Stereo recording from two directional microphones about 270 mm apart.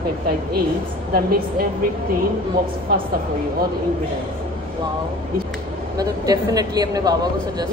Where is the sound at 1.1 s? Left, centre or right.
Right.